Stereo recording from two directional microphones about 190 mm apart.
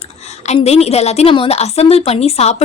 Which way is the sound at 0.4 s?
35° left (ahead or behind).